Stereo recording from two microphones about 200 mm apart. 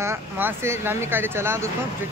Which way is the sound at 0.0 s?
10° right (ahead or behind).